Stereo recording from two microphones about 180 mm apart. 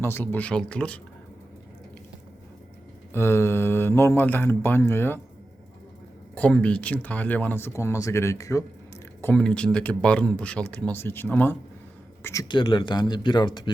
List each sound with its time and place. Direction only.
0.0 s speech: 10° left (ahead or behind)
3.1 s speech: 15° left (ahead or behind)
6.3 s speech: 5° left (ahead or behind)
9.2 s speech: 5° left (ahead or behind); by 13.7 s 25° left (ahead or behind)